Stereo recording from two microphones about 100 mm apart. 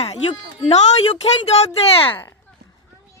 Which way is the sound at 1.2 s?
90° left.